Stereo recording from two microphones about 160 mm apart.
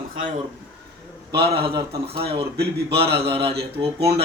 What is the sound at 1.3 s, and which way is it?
Speech, 35° right (ahead or behind).